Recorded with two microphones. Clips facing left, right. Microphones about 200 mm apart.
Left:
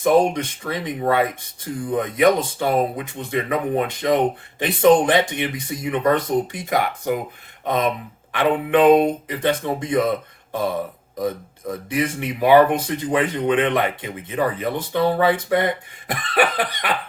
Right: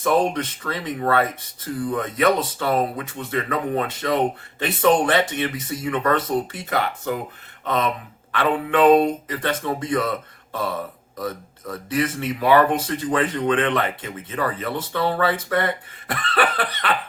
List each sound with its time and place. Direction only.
0.0 s speech: 15° left (ahead or behind)